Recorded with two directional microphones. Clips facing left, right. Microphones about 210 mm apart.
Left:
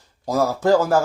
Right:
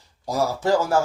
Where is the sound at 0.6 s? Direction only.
55° left (ahead or behind).